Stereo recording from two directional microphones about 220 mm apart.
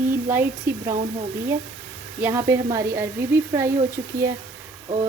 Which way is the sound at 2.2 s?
10° right (ahead or behind).